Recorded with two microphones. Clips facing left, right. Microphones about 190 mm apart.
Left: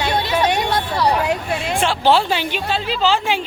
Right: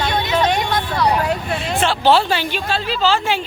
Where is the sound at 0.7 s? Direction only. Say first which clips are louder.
Even; 30° left (ahead or behind).